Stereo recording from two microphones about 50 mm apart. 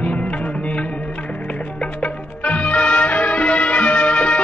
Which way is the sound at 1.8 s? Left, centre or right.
Left.